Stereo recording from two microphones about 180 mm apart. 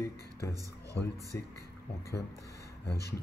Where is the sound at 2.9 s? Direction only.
60° left (ahead or behind).